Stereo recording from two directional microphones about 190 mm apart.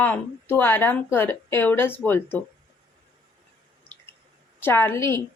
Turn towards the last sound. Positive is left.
turn(degrees=15)  # may be behind; listen again after turning